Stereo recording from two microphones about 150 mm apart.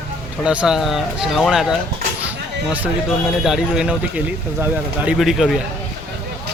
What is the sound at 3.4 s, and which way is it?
Speech, centre (ahead or behind).